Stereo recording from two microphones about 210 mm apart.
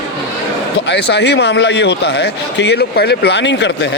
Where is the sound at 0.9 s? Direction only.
55° left (ahead or behind).